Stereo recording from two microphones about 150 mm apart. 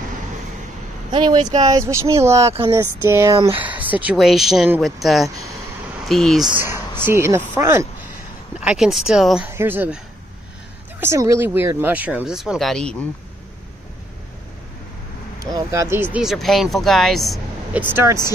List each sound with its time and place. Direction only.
1.1 s speech: 30° right (ahead or behind); by 6.5 s centre (ahead or behind)
7.1 s speech: 15° right (ahead or behind)
8.5 s speech: 5° right (ahead or behind)
9.5 s speech: 15° right (ahead or behind)
11.0 s speech: 20° right (ahead or behind); by 12.9 s centre (ahead or behind)
15.3 s speech: 20° right (ahead or behind); by 17.4 s centre (ahead or behind)
17.7 s speech: 15° right (ahead or behind)